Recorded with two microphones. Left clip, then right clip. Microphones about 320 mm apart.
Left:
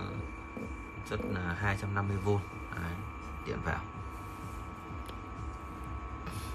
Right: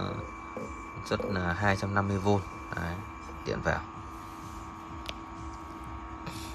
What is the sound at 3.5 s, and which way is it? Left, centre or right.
Speech, centre.